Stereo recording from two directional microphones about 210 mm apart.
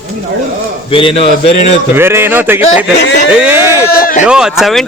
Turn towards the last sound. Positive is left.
turn(degrees=0)  # may be behind; listen again after turning